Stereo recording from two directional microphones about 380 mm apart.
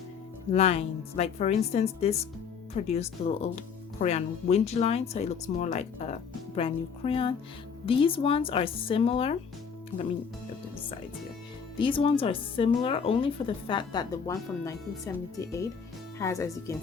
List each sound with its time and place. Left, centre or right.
0.5 s speech: centre
11.8 s speech: centre